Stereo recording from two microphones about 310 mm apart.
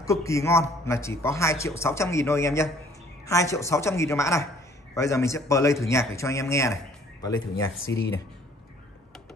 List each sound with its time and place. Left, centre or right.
0.0 s a man's voice: centre
7.9 s speech: left